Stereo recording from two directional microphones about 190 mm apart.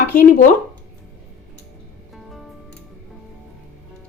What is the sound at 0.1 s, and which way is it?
Speech, 50° left (ahead or behind).